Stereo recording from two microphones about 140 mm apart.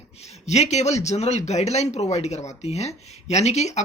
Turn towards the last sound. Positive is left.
turn(degrees=55)  # may be behind; listen again after turning